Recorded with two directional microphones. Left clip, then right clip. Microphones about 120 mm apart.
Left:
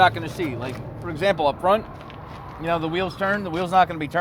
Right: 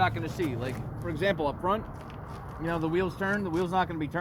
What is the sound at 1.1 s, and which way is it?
Speech, 35° left (ahead or behind).